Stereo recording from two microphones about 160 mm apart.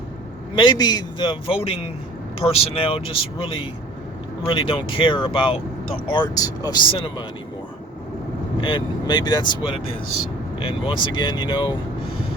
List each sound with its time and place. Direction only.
0.5 s a man's voice: 30° left (ahead or behind)
8.6 s a man's voice: 30° left (ahead or behind)